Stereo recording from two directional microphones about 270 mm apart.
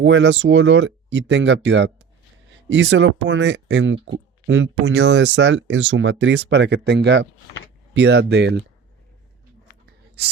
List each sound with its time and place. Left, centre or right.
0.0 s speech: right
10.2 s speech: right